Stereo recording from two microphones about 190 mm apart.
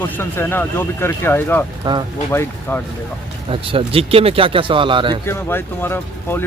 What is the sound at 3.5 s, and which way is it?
Speech, 30° right (ahead or behind).